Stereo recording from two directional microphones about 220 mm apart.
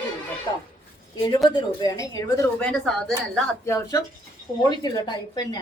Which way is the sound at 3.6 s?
15° left (ahead or behind).